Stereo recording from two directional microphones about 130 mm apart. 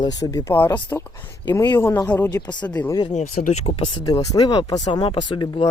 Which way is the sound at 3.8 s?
30° left (ahead or behind).